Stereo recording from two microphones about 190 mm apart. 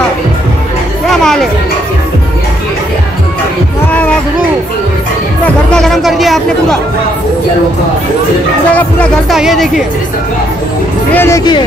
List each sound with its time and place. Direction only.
1.1 s music: centre (ahead or behind)
5.4 s music: 5° left (ahead or behind)
8.7 s speech: centre (ahead or behind)
11.1 s speech: 15° left (ahead or behind)